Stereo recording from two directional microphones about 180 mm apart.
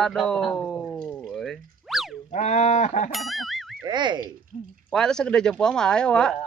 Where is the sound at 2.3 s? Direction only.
40° left (ahead or behind).